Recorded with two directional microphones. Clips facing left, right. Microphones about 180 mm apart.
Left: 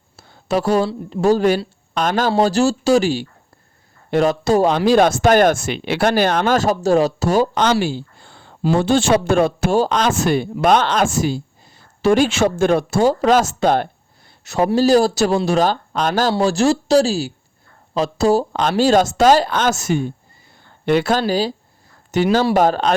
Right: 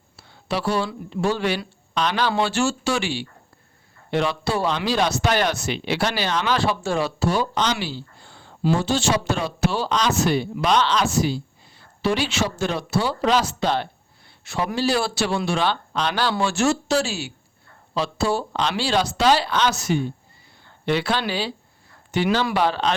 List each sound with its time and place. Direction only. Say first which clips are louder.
0.2 s speech: left 7 dB; 45° left (ahead or behind)